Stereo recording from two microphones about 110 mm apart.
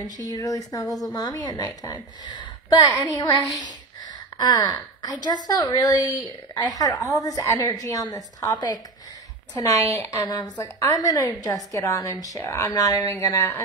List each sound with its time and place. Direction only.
0.0 s a woman's voice: 35° left (ahead or behind)